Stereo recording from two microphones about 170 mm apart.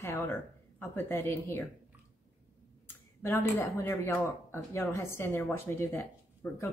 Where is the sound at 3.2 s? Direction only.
15° left (ahead or behind).